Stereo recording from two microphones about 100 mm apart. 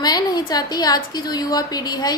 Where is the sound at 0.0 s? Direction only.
40° left (ahead or behind).